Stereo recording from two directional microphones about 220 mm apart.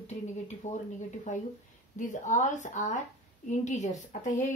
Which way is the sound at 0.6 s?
35° left (ahead or behind).